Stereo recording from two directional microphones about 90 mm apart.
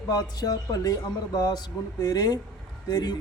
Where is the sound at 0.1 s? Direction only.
50° left (ahead or behind).